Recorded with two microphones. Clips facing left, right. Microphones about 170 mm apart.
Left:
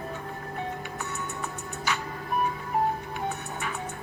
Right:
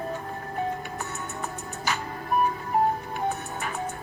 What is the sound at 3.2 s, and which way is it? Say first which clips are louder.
Music: right 3 dB; 40° right (ahead or behind).